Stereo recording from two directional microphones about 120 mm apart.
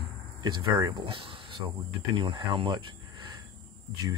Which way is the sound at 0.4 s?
35° right (ahead or behind).